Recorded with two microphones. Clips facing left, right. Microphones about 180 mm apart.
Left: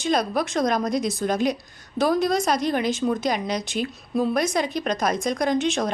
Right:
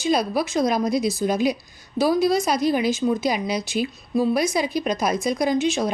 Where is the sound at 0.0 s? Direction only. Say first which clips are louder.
Right 1 dB; 5° right (ahead or behind).